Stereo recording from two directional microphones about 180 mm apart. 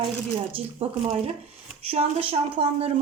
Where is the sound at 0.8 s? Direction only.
30° right (ahead or behind).